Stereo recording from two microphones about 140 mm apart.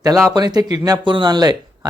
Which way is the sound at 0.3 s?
30° right (ahead or behind).